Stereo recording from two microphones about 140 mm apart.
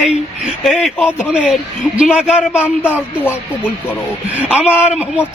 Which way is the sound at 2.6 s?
15° left (ahead or behind).